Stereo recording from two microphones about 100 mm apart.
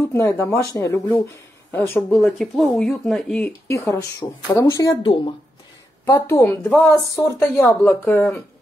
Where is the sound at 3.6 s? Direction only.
25° left (ahead or behind).